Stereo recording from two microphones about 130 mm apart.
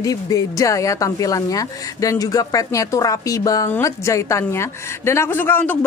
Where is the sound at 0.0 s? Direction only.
25° left (ahead or behind).